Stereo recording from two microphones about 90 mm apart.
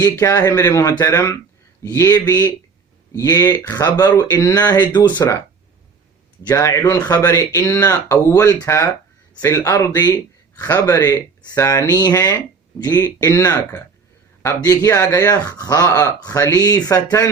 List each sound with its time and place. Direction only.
0.0 s speech: 40° left (ahead or behind)
4.2 s speech: 35° left (ahead or behind); by 5.2 s 50° left (ahead or behind)
6.5 s speech: 35° left (ahead or behind)